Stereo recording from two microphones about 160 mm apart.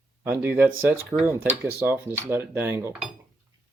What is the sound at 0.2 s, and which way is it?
Speech, 15° right (ahead or behind).